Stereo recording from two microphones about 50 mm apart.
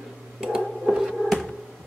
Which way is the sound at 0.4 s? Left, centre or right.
Centre.